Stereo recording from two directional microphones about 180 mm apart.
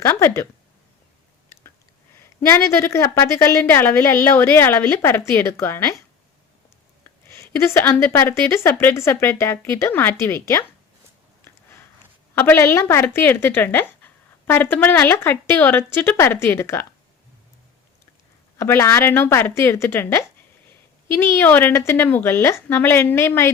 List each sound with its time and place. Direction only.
0.0 s a woman's voice: 15° left (ahead or behind)
2.5 s a woman's voice: 15° left (ahead or behind)
7.0 s a woman's voice: 15° left (ahead or behind)
12.3 s a woman's voice: 10° left (ahead or behind)
18.5 s a woman's voice: 15° left (ahead or behind)